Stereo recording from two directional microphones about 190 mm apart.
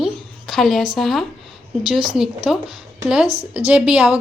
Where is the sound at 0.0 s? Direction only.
Centre (ahead or behind).